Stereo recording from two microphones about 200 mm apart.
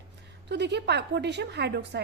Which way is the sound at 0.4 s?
60° right (ahead or behind).